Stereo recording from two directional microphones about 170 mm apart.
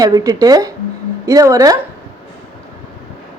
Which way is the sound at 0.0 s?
20° right (ahead or behind).